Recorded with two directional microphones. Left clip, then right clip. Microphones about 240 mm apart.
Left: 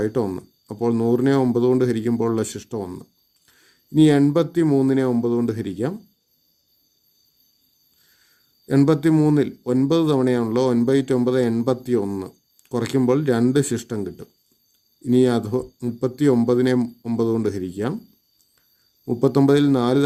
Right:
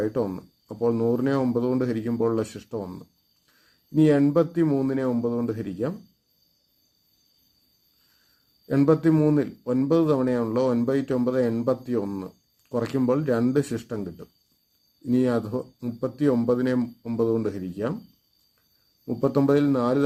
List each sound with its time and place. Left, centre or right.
0.0 s speech: left
3.9 s speech: left
8.6 s speech: left
19.0 s speech: left